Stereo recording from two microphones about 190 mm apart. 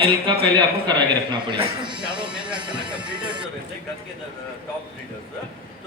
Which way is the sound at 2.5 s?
25° right (ahead or behind).